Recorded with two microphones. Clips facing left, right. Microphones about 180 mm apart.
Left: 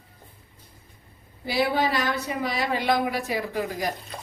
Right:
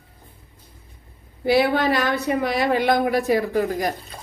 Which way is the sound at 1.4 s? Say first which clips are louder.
Right 6 dB; 60° right (ahead or behind).